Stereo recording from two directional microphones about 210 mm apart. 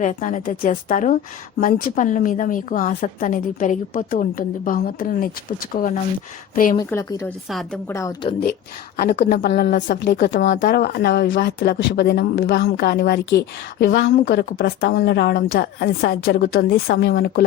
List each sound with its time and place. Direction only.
0.0 s a woman's voice: 35° left (ahead or behind)
6.7 s a woman's voice: 15° left (ahead or behind)
9.3 s a woman's voice: 45° left (ahead or behind)
10.4 s a woman's voice: 40° left (ahead or behind); by 12.7 s 60° left (ahead or behind)
12.7 s a woman's voice: 50° left (ahead or behind)